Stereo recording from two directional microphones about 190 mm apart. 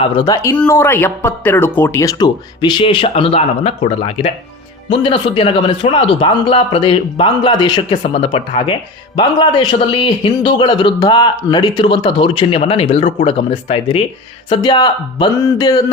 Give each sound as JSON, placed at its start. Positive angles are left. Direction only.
{"t": 0.0, "sound": "speech", "side_deg": 20}
{"t": 0.5, "sound": "speech", "side_deg": 10}